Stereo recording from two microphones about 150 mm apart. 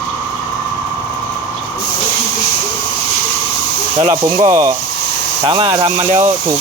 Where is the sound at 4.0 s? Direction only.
25° right (ahead or behind).